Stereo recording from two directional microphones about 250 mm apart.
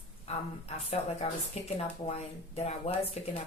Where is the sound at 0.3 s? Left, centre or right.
Left.